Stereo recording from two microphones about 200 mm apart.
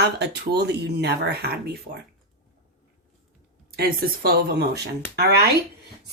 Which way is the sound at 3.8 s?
50° right (ahead or behind).